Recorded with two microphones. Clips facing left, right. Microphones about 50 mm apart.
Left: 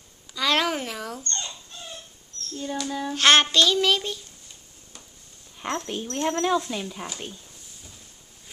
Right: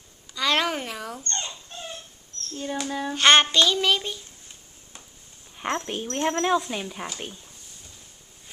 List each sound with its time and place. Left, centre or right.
0.3 s a sound: centre
1.3 s dog: right
2.5 s rodents: right
3.2 s child singing: centre
5.6 s speech: centre
6.7 s rodents: centre